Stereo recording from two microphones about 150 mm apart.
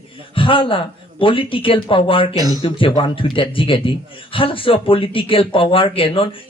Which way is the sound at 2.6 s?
35° left (ahead or behind).